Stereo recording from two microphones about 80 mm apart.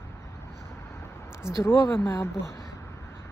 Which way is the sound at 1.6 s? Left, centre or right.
Left.